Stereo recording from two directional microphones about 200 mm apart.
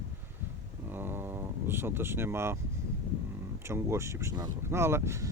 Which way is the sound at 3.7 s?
15° right (ahead or behind).